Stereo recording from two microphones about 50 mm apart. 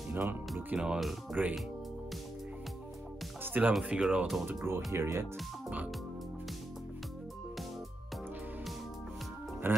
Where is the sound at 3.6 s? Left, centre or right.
Right.